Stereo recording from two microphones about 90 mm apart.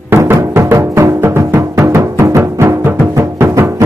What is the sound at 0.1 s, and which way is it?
Music, 30° right (ahead or behind).